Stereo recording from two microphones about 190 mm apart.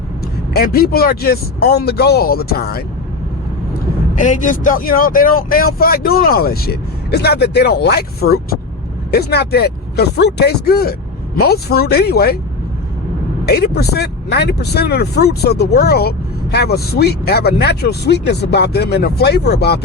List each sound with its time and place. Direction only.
0.5 s speech: 55° left (ahead or behind)
4.2 s speech: 45° left (ahead or behind)
13.4 s speech: 55° left (ahead or behind)